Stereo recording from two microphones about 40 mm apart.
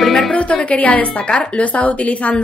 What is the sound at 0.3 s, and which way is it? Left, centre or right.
A woman's voice, left.